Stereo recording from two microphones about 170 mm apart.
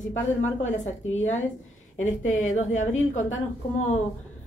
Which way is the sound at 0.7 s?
45° left (ahead or behind).